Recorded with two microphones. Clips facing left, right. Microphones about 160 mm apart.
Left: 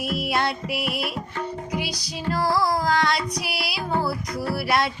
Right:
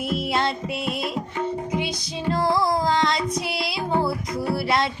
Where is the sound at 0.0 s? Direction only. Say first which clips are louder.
Right 1 dB; 25° right (ahead or behind).